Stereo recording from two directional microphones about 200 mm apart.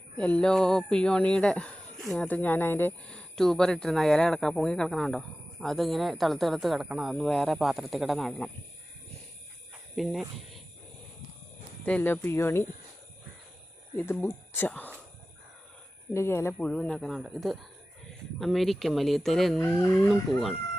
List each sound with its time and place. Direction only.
0.2 s speech: 5° left (ahead or behind)
9.9 s speech: centre (ahead or behind)
11.8 s speech: 10° left (ahead or behind)
13.9 s speech: 10° left (ahead or behind)
16.1 s speech: 10° left (ahead or behind)